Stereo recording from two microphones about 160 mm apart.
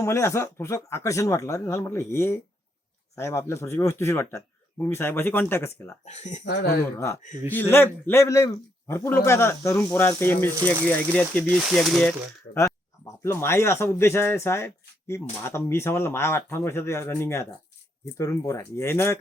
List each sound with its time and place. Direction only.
0.0 s a man's voice: 20° left (ahead or behind)
6.1 s speech: 45° left (ahead or behind)
6.4 s speech: 90° left
7.5 s a man's voice: 15° left (ahead or behind)
13.2 s a man's voice: 15° left (ahead or behind)